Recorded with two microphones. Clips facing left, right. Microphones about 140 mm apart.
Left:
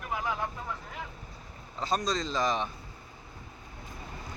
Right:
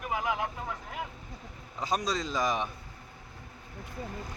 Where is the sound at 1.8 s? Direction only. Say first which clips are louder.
Left 1 dB; 10° right (ahead or behind).